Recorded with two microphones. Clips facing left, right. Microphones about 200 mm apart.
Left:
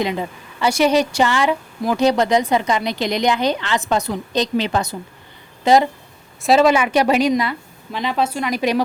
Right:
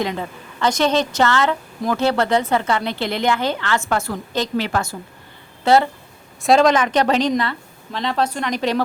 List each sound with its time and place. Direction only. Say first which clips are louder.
0.0 s a woman's voice: left 2 dB; 15° left (ahead or behind)
6.4 s a woman's voice: even; 5° left (ahead or behind)